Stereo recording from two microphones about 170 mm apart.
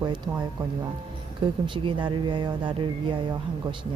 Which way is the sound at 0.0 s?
25° right (ahead or behind).